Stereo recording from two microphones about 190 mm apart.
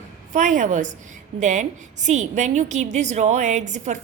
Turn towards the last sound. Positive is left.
turn(degrees=-40)  # may be behind; listen again after turning